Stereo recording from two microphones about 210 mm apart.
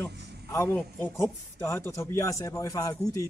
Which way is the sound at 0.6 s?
5° left (ahead or behind).